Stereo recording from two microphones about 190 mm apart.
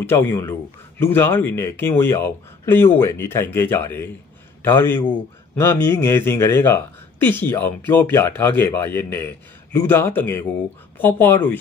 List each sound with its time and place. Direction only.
0.1 s a man's voice: 10° left (ahead or behind)